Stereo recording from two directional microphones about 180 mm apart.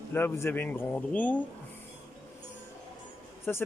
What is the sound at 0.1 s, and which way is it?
Speech, 10° left (ahead or behind).